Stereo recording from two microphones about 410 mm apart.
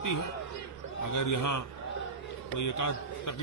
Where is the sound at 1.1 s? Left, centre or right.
Left.